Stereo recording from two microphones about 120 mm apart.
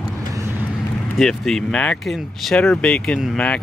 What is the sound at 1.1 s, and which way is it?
Speech, 5° left (ahead or behind).